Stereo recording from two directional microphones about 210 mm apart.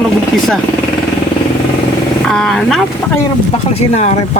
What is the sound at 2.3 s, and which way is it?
Speech, 5° left (ahead or behind).